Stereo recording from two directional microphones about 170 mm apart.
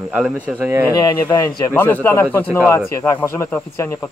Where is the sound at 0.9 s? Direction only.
20° left (ahead or behind).